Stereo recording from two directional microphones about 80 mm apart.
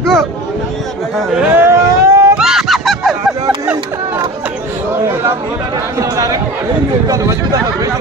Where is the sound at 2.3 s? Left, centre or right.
Centre.